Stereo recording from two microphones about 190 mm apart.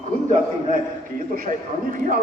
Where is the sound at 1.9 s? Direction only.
45° right (ahead or behind).